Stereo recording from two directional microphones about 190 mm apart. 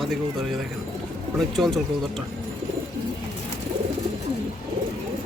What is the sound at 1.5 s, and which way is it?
Speech, centre (ahead or behind).